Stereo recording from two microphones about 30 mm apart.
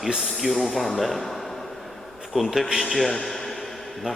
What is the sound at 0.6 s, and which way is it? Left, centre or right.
Speech, centre.